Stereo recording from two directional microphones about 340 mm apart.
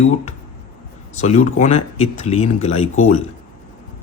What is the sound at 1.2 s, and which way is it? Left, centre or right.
A man's voice, centre.